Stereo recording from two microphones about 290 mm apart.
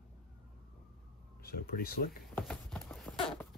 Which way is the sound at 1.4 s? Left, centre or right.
Left.